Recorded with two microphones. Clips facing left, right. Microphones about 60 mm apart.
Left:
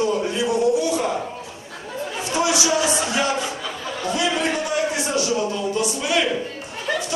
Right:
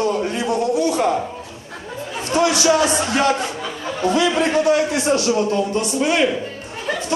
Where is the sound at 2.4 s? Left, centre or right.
Right.